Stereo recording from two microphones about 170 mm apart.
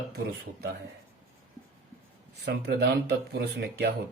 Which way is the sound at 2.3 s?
75° right (ahead or behind).